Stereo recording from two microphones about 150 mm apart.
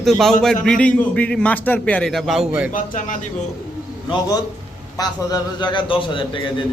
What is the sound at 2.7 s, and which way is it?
Speech, 60° left (ahead or behind).